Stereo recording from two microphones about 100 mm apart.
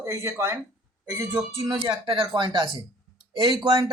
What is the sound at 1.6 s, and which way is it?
Speech, 45° right (ahead or behind).